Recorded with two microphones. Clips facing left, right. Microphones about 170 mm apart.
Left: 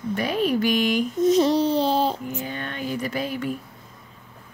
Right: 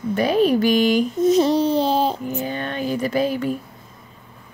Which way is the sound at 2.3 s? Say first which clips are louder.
Right 5 dB; 30° right (ahead or behind).